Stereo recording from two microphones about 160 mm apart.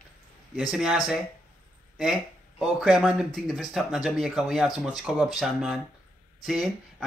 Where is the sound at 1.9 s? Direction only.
Centre (ahead or behind).